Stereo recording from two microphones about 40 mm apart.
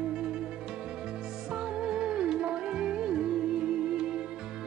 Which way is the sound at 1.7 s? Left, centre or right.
Centre.